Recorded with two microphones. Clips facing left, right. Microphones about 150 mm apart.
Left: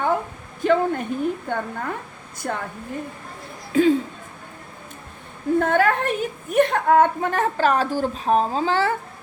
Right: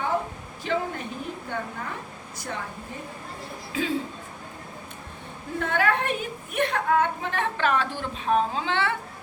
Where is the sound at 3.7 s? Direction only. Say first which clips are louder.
Left 12 dB; 50° left (ahead or behind).